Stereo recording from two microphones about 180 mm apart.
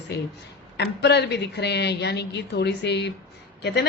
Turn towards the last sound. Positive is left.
turn(degrees=70)  # may be behind; listen again after turning